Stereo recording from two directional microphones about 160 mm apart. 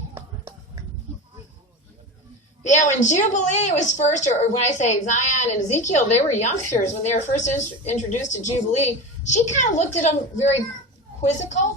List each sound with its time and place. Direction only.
2.6 s a woman's voice: 50° left (ahead or behind)
11.2 s a woman's voice: 45° left (ahead or behind)